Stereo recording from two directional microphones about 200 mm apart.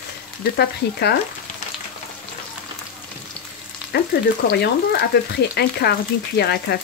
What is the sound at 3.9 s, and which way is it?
Speech, 55° left (ahead or behind).